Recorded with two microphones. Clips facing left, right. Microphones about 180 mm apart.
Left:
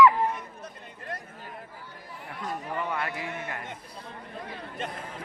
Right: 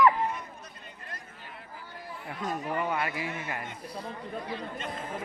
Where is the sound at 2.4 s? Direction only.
20° right (ahead or behind).